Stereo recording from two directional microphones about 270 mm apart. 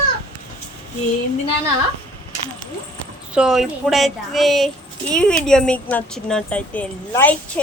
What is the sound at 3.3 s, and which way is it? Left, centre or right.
A woman's voice, centre.